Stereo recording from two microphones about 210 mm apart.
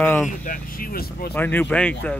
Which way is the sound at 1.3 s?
10° left (ahead or behind).